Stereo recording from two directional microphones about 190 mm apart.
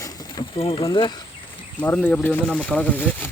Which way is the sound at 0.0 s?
20° left (ahead or behind).